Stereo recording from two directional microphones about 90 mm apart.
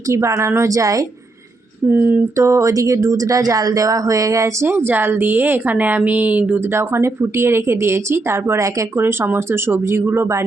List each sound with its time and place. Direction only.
0.1 s speech: 30° right (ahead or behind)
1.9 s speech: 20° right (ahead or behind)
2.3 s speech: 35° right (ahead or behind)
4.7 s speech: 25° right (ahead or behind)
6.7 s speech: 30° right (ahead or behind)